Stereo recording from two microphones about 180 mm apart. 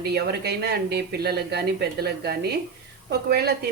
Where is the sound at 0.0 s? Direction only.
65° right (ahead or behind).